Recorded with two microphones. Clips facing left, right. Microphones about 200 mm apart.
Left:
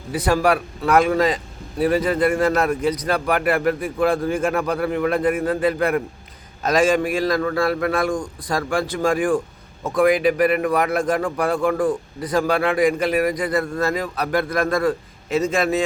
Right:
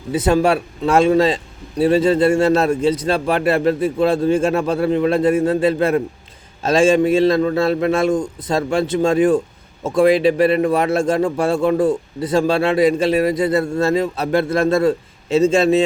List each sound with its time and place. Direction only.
0.1 s a man's voice: 25° right (ahead or behind)